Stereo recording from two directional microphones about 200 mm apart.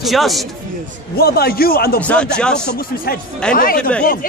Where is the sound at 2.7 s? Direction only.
50° left (ahead or behind).